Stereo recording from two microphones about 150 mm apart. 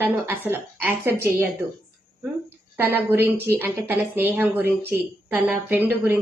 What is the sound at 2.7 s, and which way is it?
A woman's voice, 15° right (ahead or behind).